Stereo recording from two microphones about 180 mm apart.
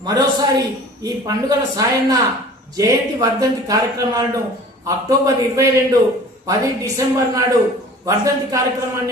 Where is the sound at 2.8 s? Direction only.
20° right (ahead or behind).